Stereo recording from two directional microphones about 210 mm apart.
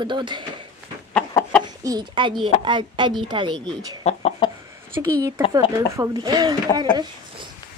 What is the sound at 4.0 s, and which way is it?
Chicken, 30° left (ahead or behind).